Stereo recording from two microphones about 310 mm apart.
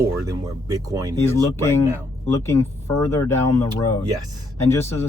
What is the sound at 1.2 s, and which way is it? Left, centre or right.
Speech, centre.